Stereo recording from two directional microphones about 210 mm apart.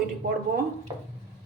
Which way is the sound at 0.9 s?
20° right (ahead or behind).